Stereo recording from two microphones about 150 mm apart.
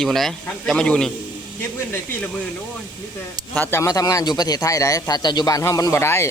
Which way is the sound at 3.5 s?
15° left (ahead or behind).